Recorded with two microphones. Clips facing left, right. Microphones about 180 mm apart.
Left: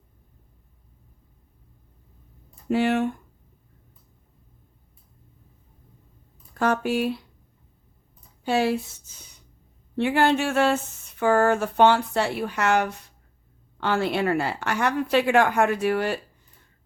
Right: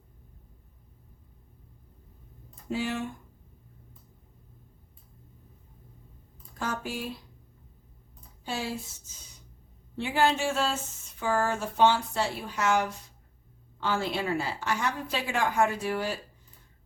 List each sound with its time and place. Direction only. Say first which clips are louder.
2.6 s speech: left 9 dB; 65° left (ahead or behind)
6.6 s speech: left 11 dB; 65° left (ahead or behind)
8.4 s a sound: left 11 dB; 65° left (ahead or behind)